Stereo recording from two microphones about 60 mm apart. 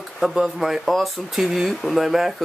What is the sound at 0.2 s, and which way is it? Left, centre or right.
Speech, centre.